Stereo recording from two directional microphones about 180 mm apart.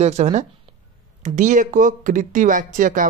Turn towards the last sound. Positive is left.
turn(degrees=-45)  # may be behind; listen again after turning